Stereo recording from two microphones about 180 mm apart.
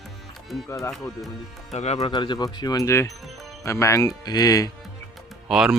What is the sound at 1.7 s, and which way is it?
Speech, 40° left (ahead or behind).